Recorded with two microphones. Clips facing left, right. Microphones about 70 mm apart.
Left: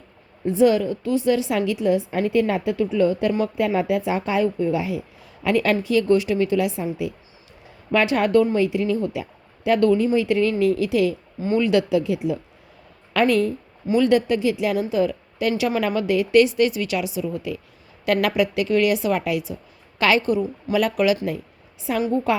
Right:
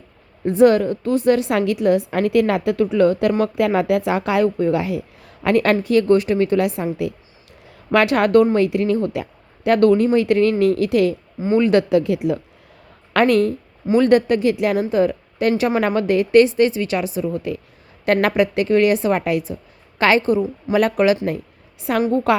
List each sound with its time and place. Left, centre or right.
0.4 s a woman's voice: right
4.4 s a woman's voice: right
11.3 s a woman's voice: right
11.6 s a woman's voice: right
13.8 s a woman's voice: right
20.7 s a woman's voice: right
21.2 s a sound: right
22.0 s a woman's voice: right